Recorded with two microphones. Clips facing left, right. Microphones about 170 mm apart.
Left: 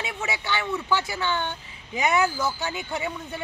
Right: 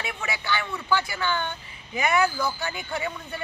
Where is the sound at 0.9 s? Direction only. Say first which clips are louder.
Right 2 dB; 20° left (ahead or behind).